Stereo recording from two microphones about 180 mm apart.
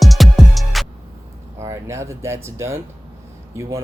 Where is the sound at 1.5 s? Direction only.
15° right (ahead or behind).